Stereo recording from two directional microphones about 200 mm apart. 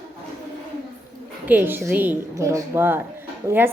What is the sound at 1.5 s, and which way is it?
A child's voice, 10° right (ahead or behind).